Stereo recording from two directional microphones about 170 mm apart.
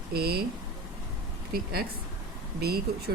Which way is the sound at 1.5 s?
65° right (ahead or behind).